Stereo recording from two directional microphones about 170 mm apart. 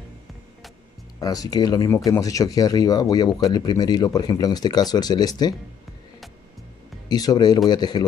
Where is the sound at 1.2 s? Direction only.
20° left (ahead or behind).